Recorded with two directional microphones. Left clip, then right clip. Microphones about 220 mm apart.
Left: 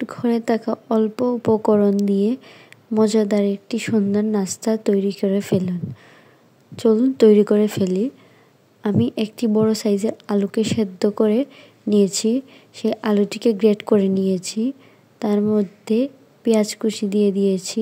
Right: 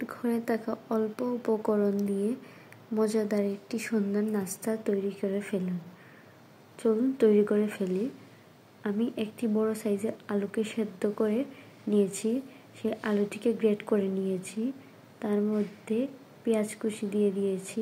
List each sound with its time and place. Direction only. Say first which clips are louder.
0.0 s speech: left 10 dB; 40° left (ahead or behind)
6.8 s speech: left 10 dB; 40° left (ahead or behind)